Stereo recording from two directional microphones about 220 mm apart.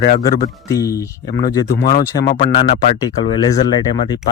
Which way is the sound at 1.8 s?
40° left (ahead or behind).